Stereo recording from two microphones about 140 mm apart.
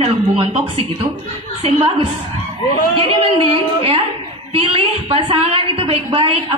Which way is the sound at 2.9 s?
40° right (ahead or behind).